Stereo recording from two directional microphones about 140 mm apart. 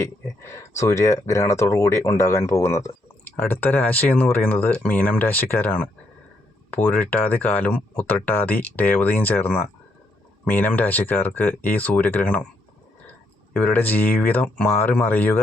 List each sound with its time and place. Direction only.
0.0 s speech: 20° left (ahead or behind)
13.5 s speech: 10° left (ahead or behind)